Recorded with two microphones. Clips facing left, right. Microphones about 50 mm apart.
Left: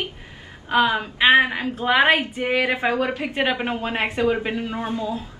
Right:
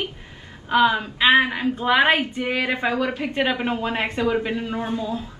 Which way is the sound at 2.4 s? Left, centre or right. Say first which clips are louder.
Left 2 dB; left.